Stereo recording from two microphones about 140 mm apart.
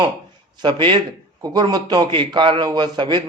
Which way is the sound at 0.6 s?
35° right (ahead or behind).